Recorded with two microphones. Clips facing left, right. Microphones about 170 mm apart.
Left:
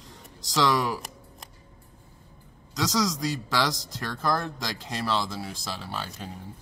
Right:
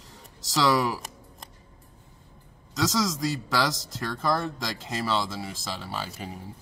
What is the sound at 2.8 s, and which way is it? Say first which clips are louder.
Speech: right 1 dB; centre (ahead or behind).